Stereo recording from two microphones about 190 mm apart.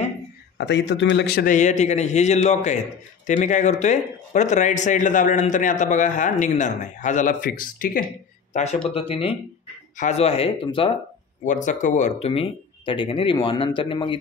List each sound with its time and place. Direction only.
0.6 s speech: 65° left (ahead or behind)
1.5 s speech: 40° left (ahead or behind)
8.9 s speech: 30° left (ahead or behind)
11.4 s speech: 40° left (ahead or behind); by 14.1 s 25° left (ahead or behind)